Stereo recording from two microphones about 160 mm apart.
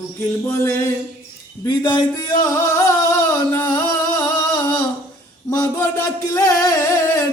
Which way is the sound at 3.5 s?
15° left (ahead or behind).